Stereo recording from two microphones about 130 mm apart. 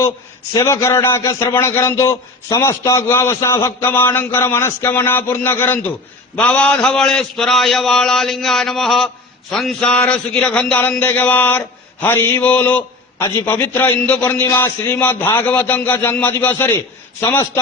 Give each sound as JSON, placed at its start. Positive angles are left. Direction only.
{"t": 0.5, "sound": "a man's voice", "side_deg": 20}